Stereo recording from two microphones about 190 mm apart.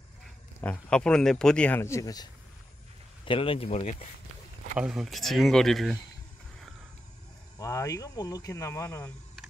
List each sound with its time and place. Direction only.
0.6 s speech: 5° left (ahead or behind)
3.3 s speech: 30° left (ahead or behind)
4.7 s speech: 5° right (ahead or behind)
7.5 s speech: 15° left (ahead or behind)